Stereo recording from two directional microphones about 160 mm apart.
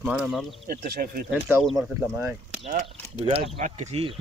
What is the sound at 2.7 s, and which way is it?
Speech, 45° right (ahead or behind).